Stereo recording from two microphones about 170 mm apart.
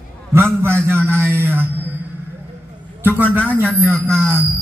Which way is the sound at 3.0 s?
10° right (ahead or behind).